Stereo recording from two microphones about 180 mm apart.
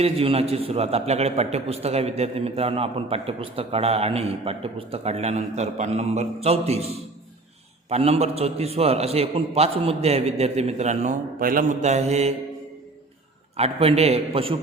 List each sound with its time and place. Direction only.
0.0 s a man's voice: 35° right (ahead or behind)
13.6 s a man's voice: 35° right (ahead or behind)